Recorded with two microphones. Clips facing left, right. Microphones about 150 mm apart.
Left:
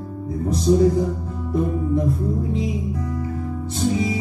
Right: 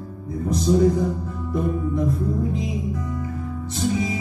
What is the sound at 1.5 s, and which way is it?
Music, 30° left (ahead or behind).